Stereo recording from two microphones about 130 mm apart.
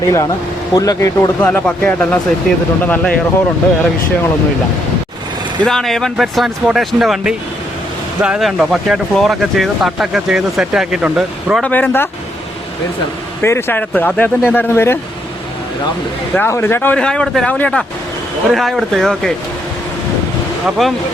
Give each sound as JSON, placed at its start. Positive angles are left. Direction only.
{"t": 0.0, "sound": "speech", "side_deg": 25}
{"t": 1.4, "sound": "speech", "side_deg": 10}
{"t": 5.6, "sound": "speech", "side_deg": 5}
{"t": 11.6, "sound": "speech", "side_deg": 15}
{"t": 13.4, "sound": "speech", "side_deg": 20}
{"t": 16.3, "sound": "speech", "side_deg": 15}
{"t": 20.7, "sound": "speech", "side_deg": 0}